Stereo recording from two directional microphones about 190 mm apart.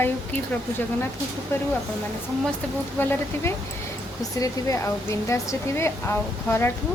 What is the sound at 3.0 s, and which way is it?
Speech, 10° left (ahead or behind).